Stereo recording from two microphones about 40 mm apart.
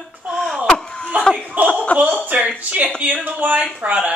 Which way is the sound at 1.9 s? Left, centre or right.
Left.